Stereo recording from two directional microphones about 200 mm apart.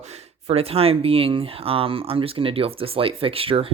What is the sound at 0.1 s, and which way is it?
Speech, 30° right (ahead or behind).